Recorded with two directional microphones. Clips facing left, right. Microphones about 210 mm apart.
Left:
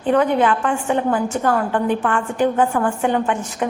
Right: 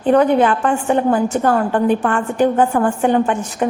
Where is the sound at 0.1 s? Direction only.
40° right (ahead or behind).